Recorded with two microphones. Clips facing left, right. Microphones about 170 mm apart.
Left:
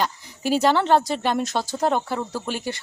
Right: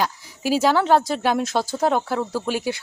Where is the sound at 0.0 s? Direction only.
5° right (ahead or behind).